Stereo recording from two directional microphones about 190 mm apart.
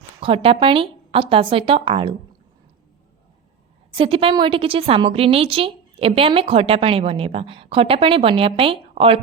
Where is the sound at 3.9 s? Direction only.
30° right (ahead or behind).